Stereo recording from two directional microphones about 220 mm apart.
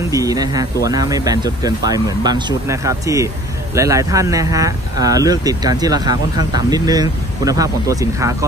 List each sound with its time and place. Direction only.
0.1 s speech: 15° right (ahead or behind)